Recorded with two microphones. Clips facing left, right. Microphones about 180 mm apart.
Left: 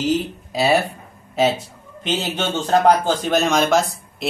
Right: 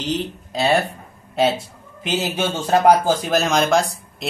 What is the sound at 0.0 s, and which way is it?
Speech, 5° left (ahead or behind).